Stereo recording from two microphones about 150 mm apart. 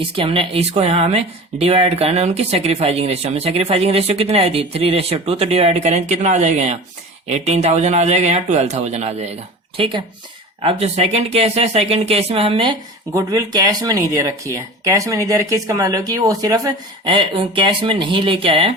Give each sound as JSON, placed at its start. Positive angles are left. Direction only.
{"t": 0.2, "sound": "speech", "side_deg": -35}
{"t": 9.7, "sound": "speech", "side_deg": -35}
{"t": 13.1, "sound": "speech", "side_deg": -25}